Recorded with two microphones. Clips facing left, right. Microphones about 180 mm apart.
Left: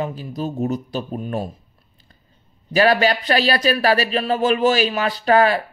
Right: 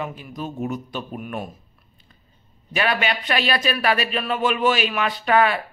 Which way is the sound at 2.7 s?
35° left (ahead or behind).